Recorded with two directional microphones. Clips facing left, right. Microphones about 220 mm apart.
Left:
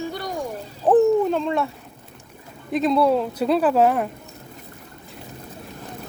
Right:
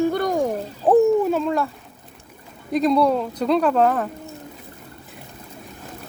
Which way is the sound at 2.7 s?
Centre (ahead or behind).